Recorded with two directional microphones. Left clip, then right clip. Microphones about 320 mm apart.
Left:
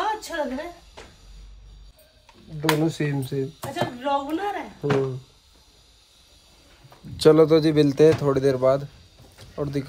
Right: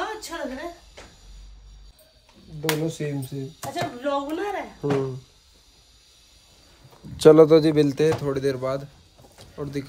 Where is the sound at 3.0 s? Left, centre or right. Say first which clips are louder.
Left 3 dB; centre.